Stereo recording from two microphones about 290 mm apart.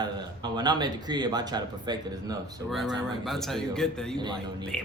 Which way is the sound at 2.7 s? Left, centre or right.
Centre.